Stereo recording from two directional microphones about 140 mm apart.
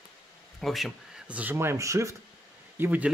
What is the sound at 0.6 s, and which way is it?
Speech, centre (ahead or behind).